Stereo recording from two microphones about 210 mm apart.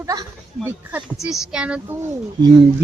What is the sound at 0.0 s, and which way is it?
Speech, 15° right (ahead or behind).